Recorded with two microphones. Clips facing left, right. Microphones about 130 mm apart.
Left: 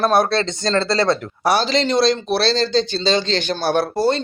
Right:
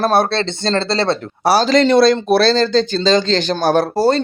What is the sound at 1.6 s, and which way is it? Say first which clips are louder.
Speech: right 6 dB; 55° right (ahead or behind).